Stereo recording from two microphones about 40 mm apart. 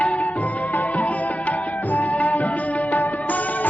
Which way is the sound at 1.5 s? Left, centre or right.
Left.